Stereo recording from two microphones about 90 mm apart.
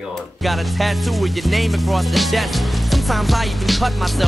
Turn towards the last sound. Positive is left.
turn(degrees=0)  # may be behind; listen again after turning